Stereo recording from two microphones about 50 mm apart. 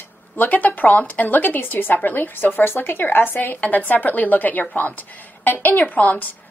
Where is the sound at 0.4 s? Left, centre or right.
Left.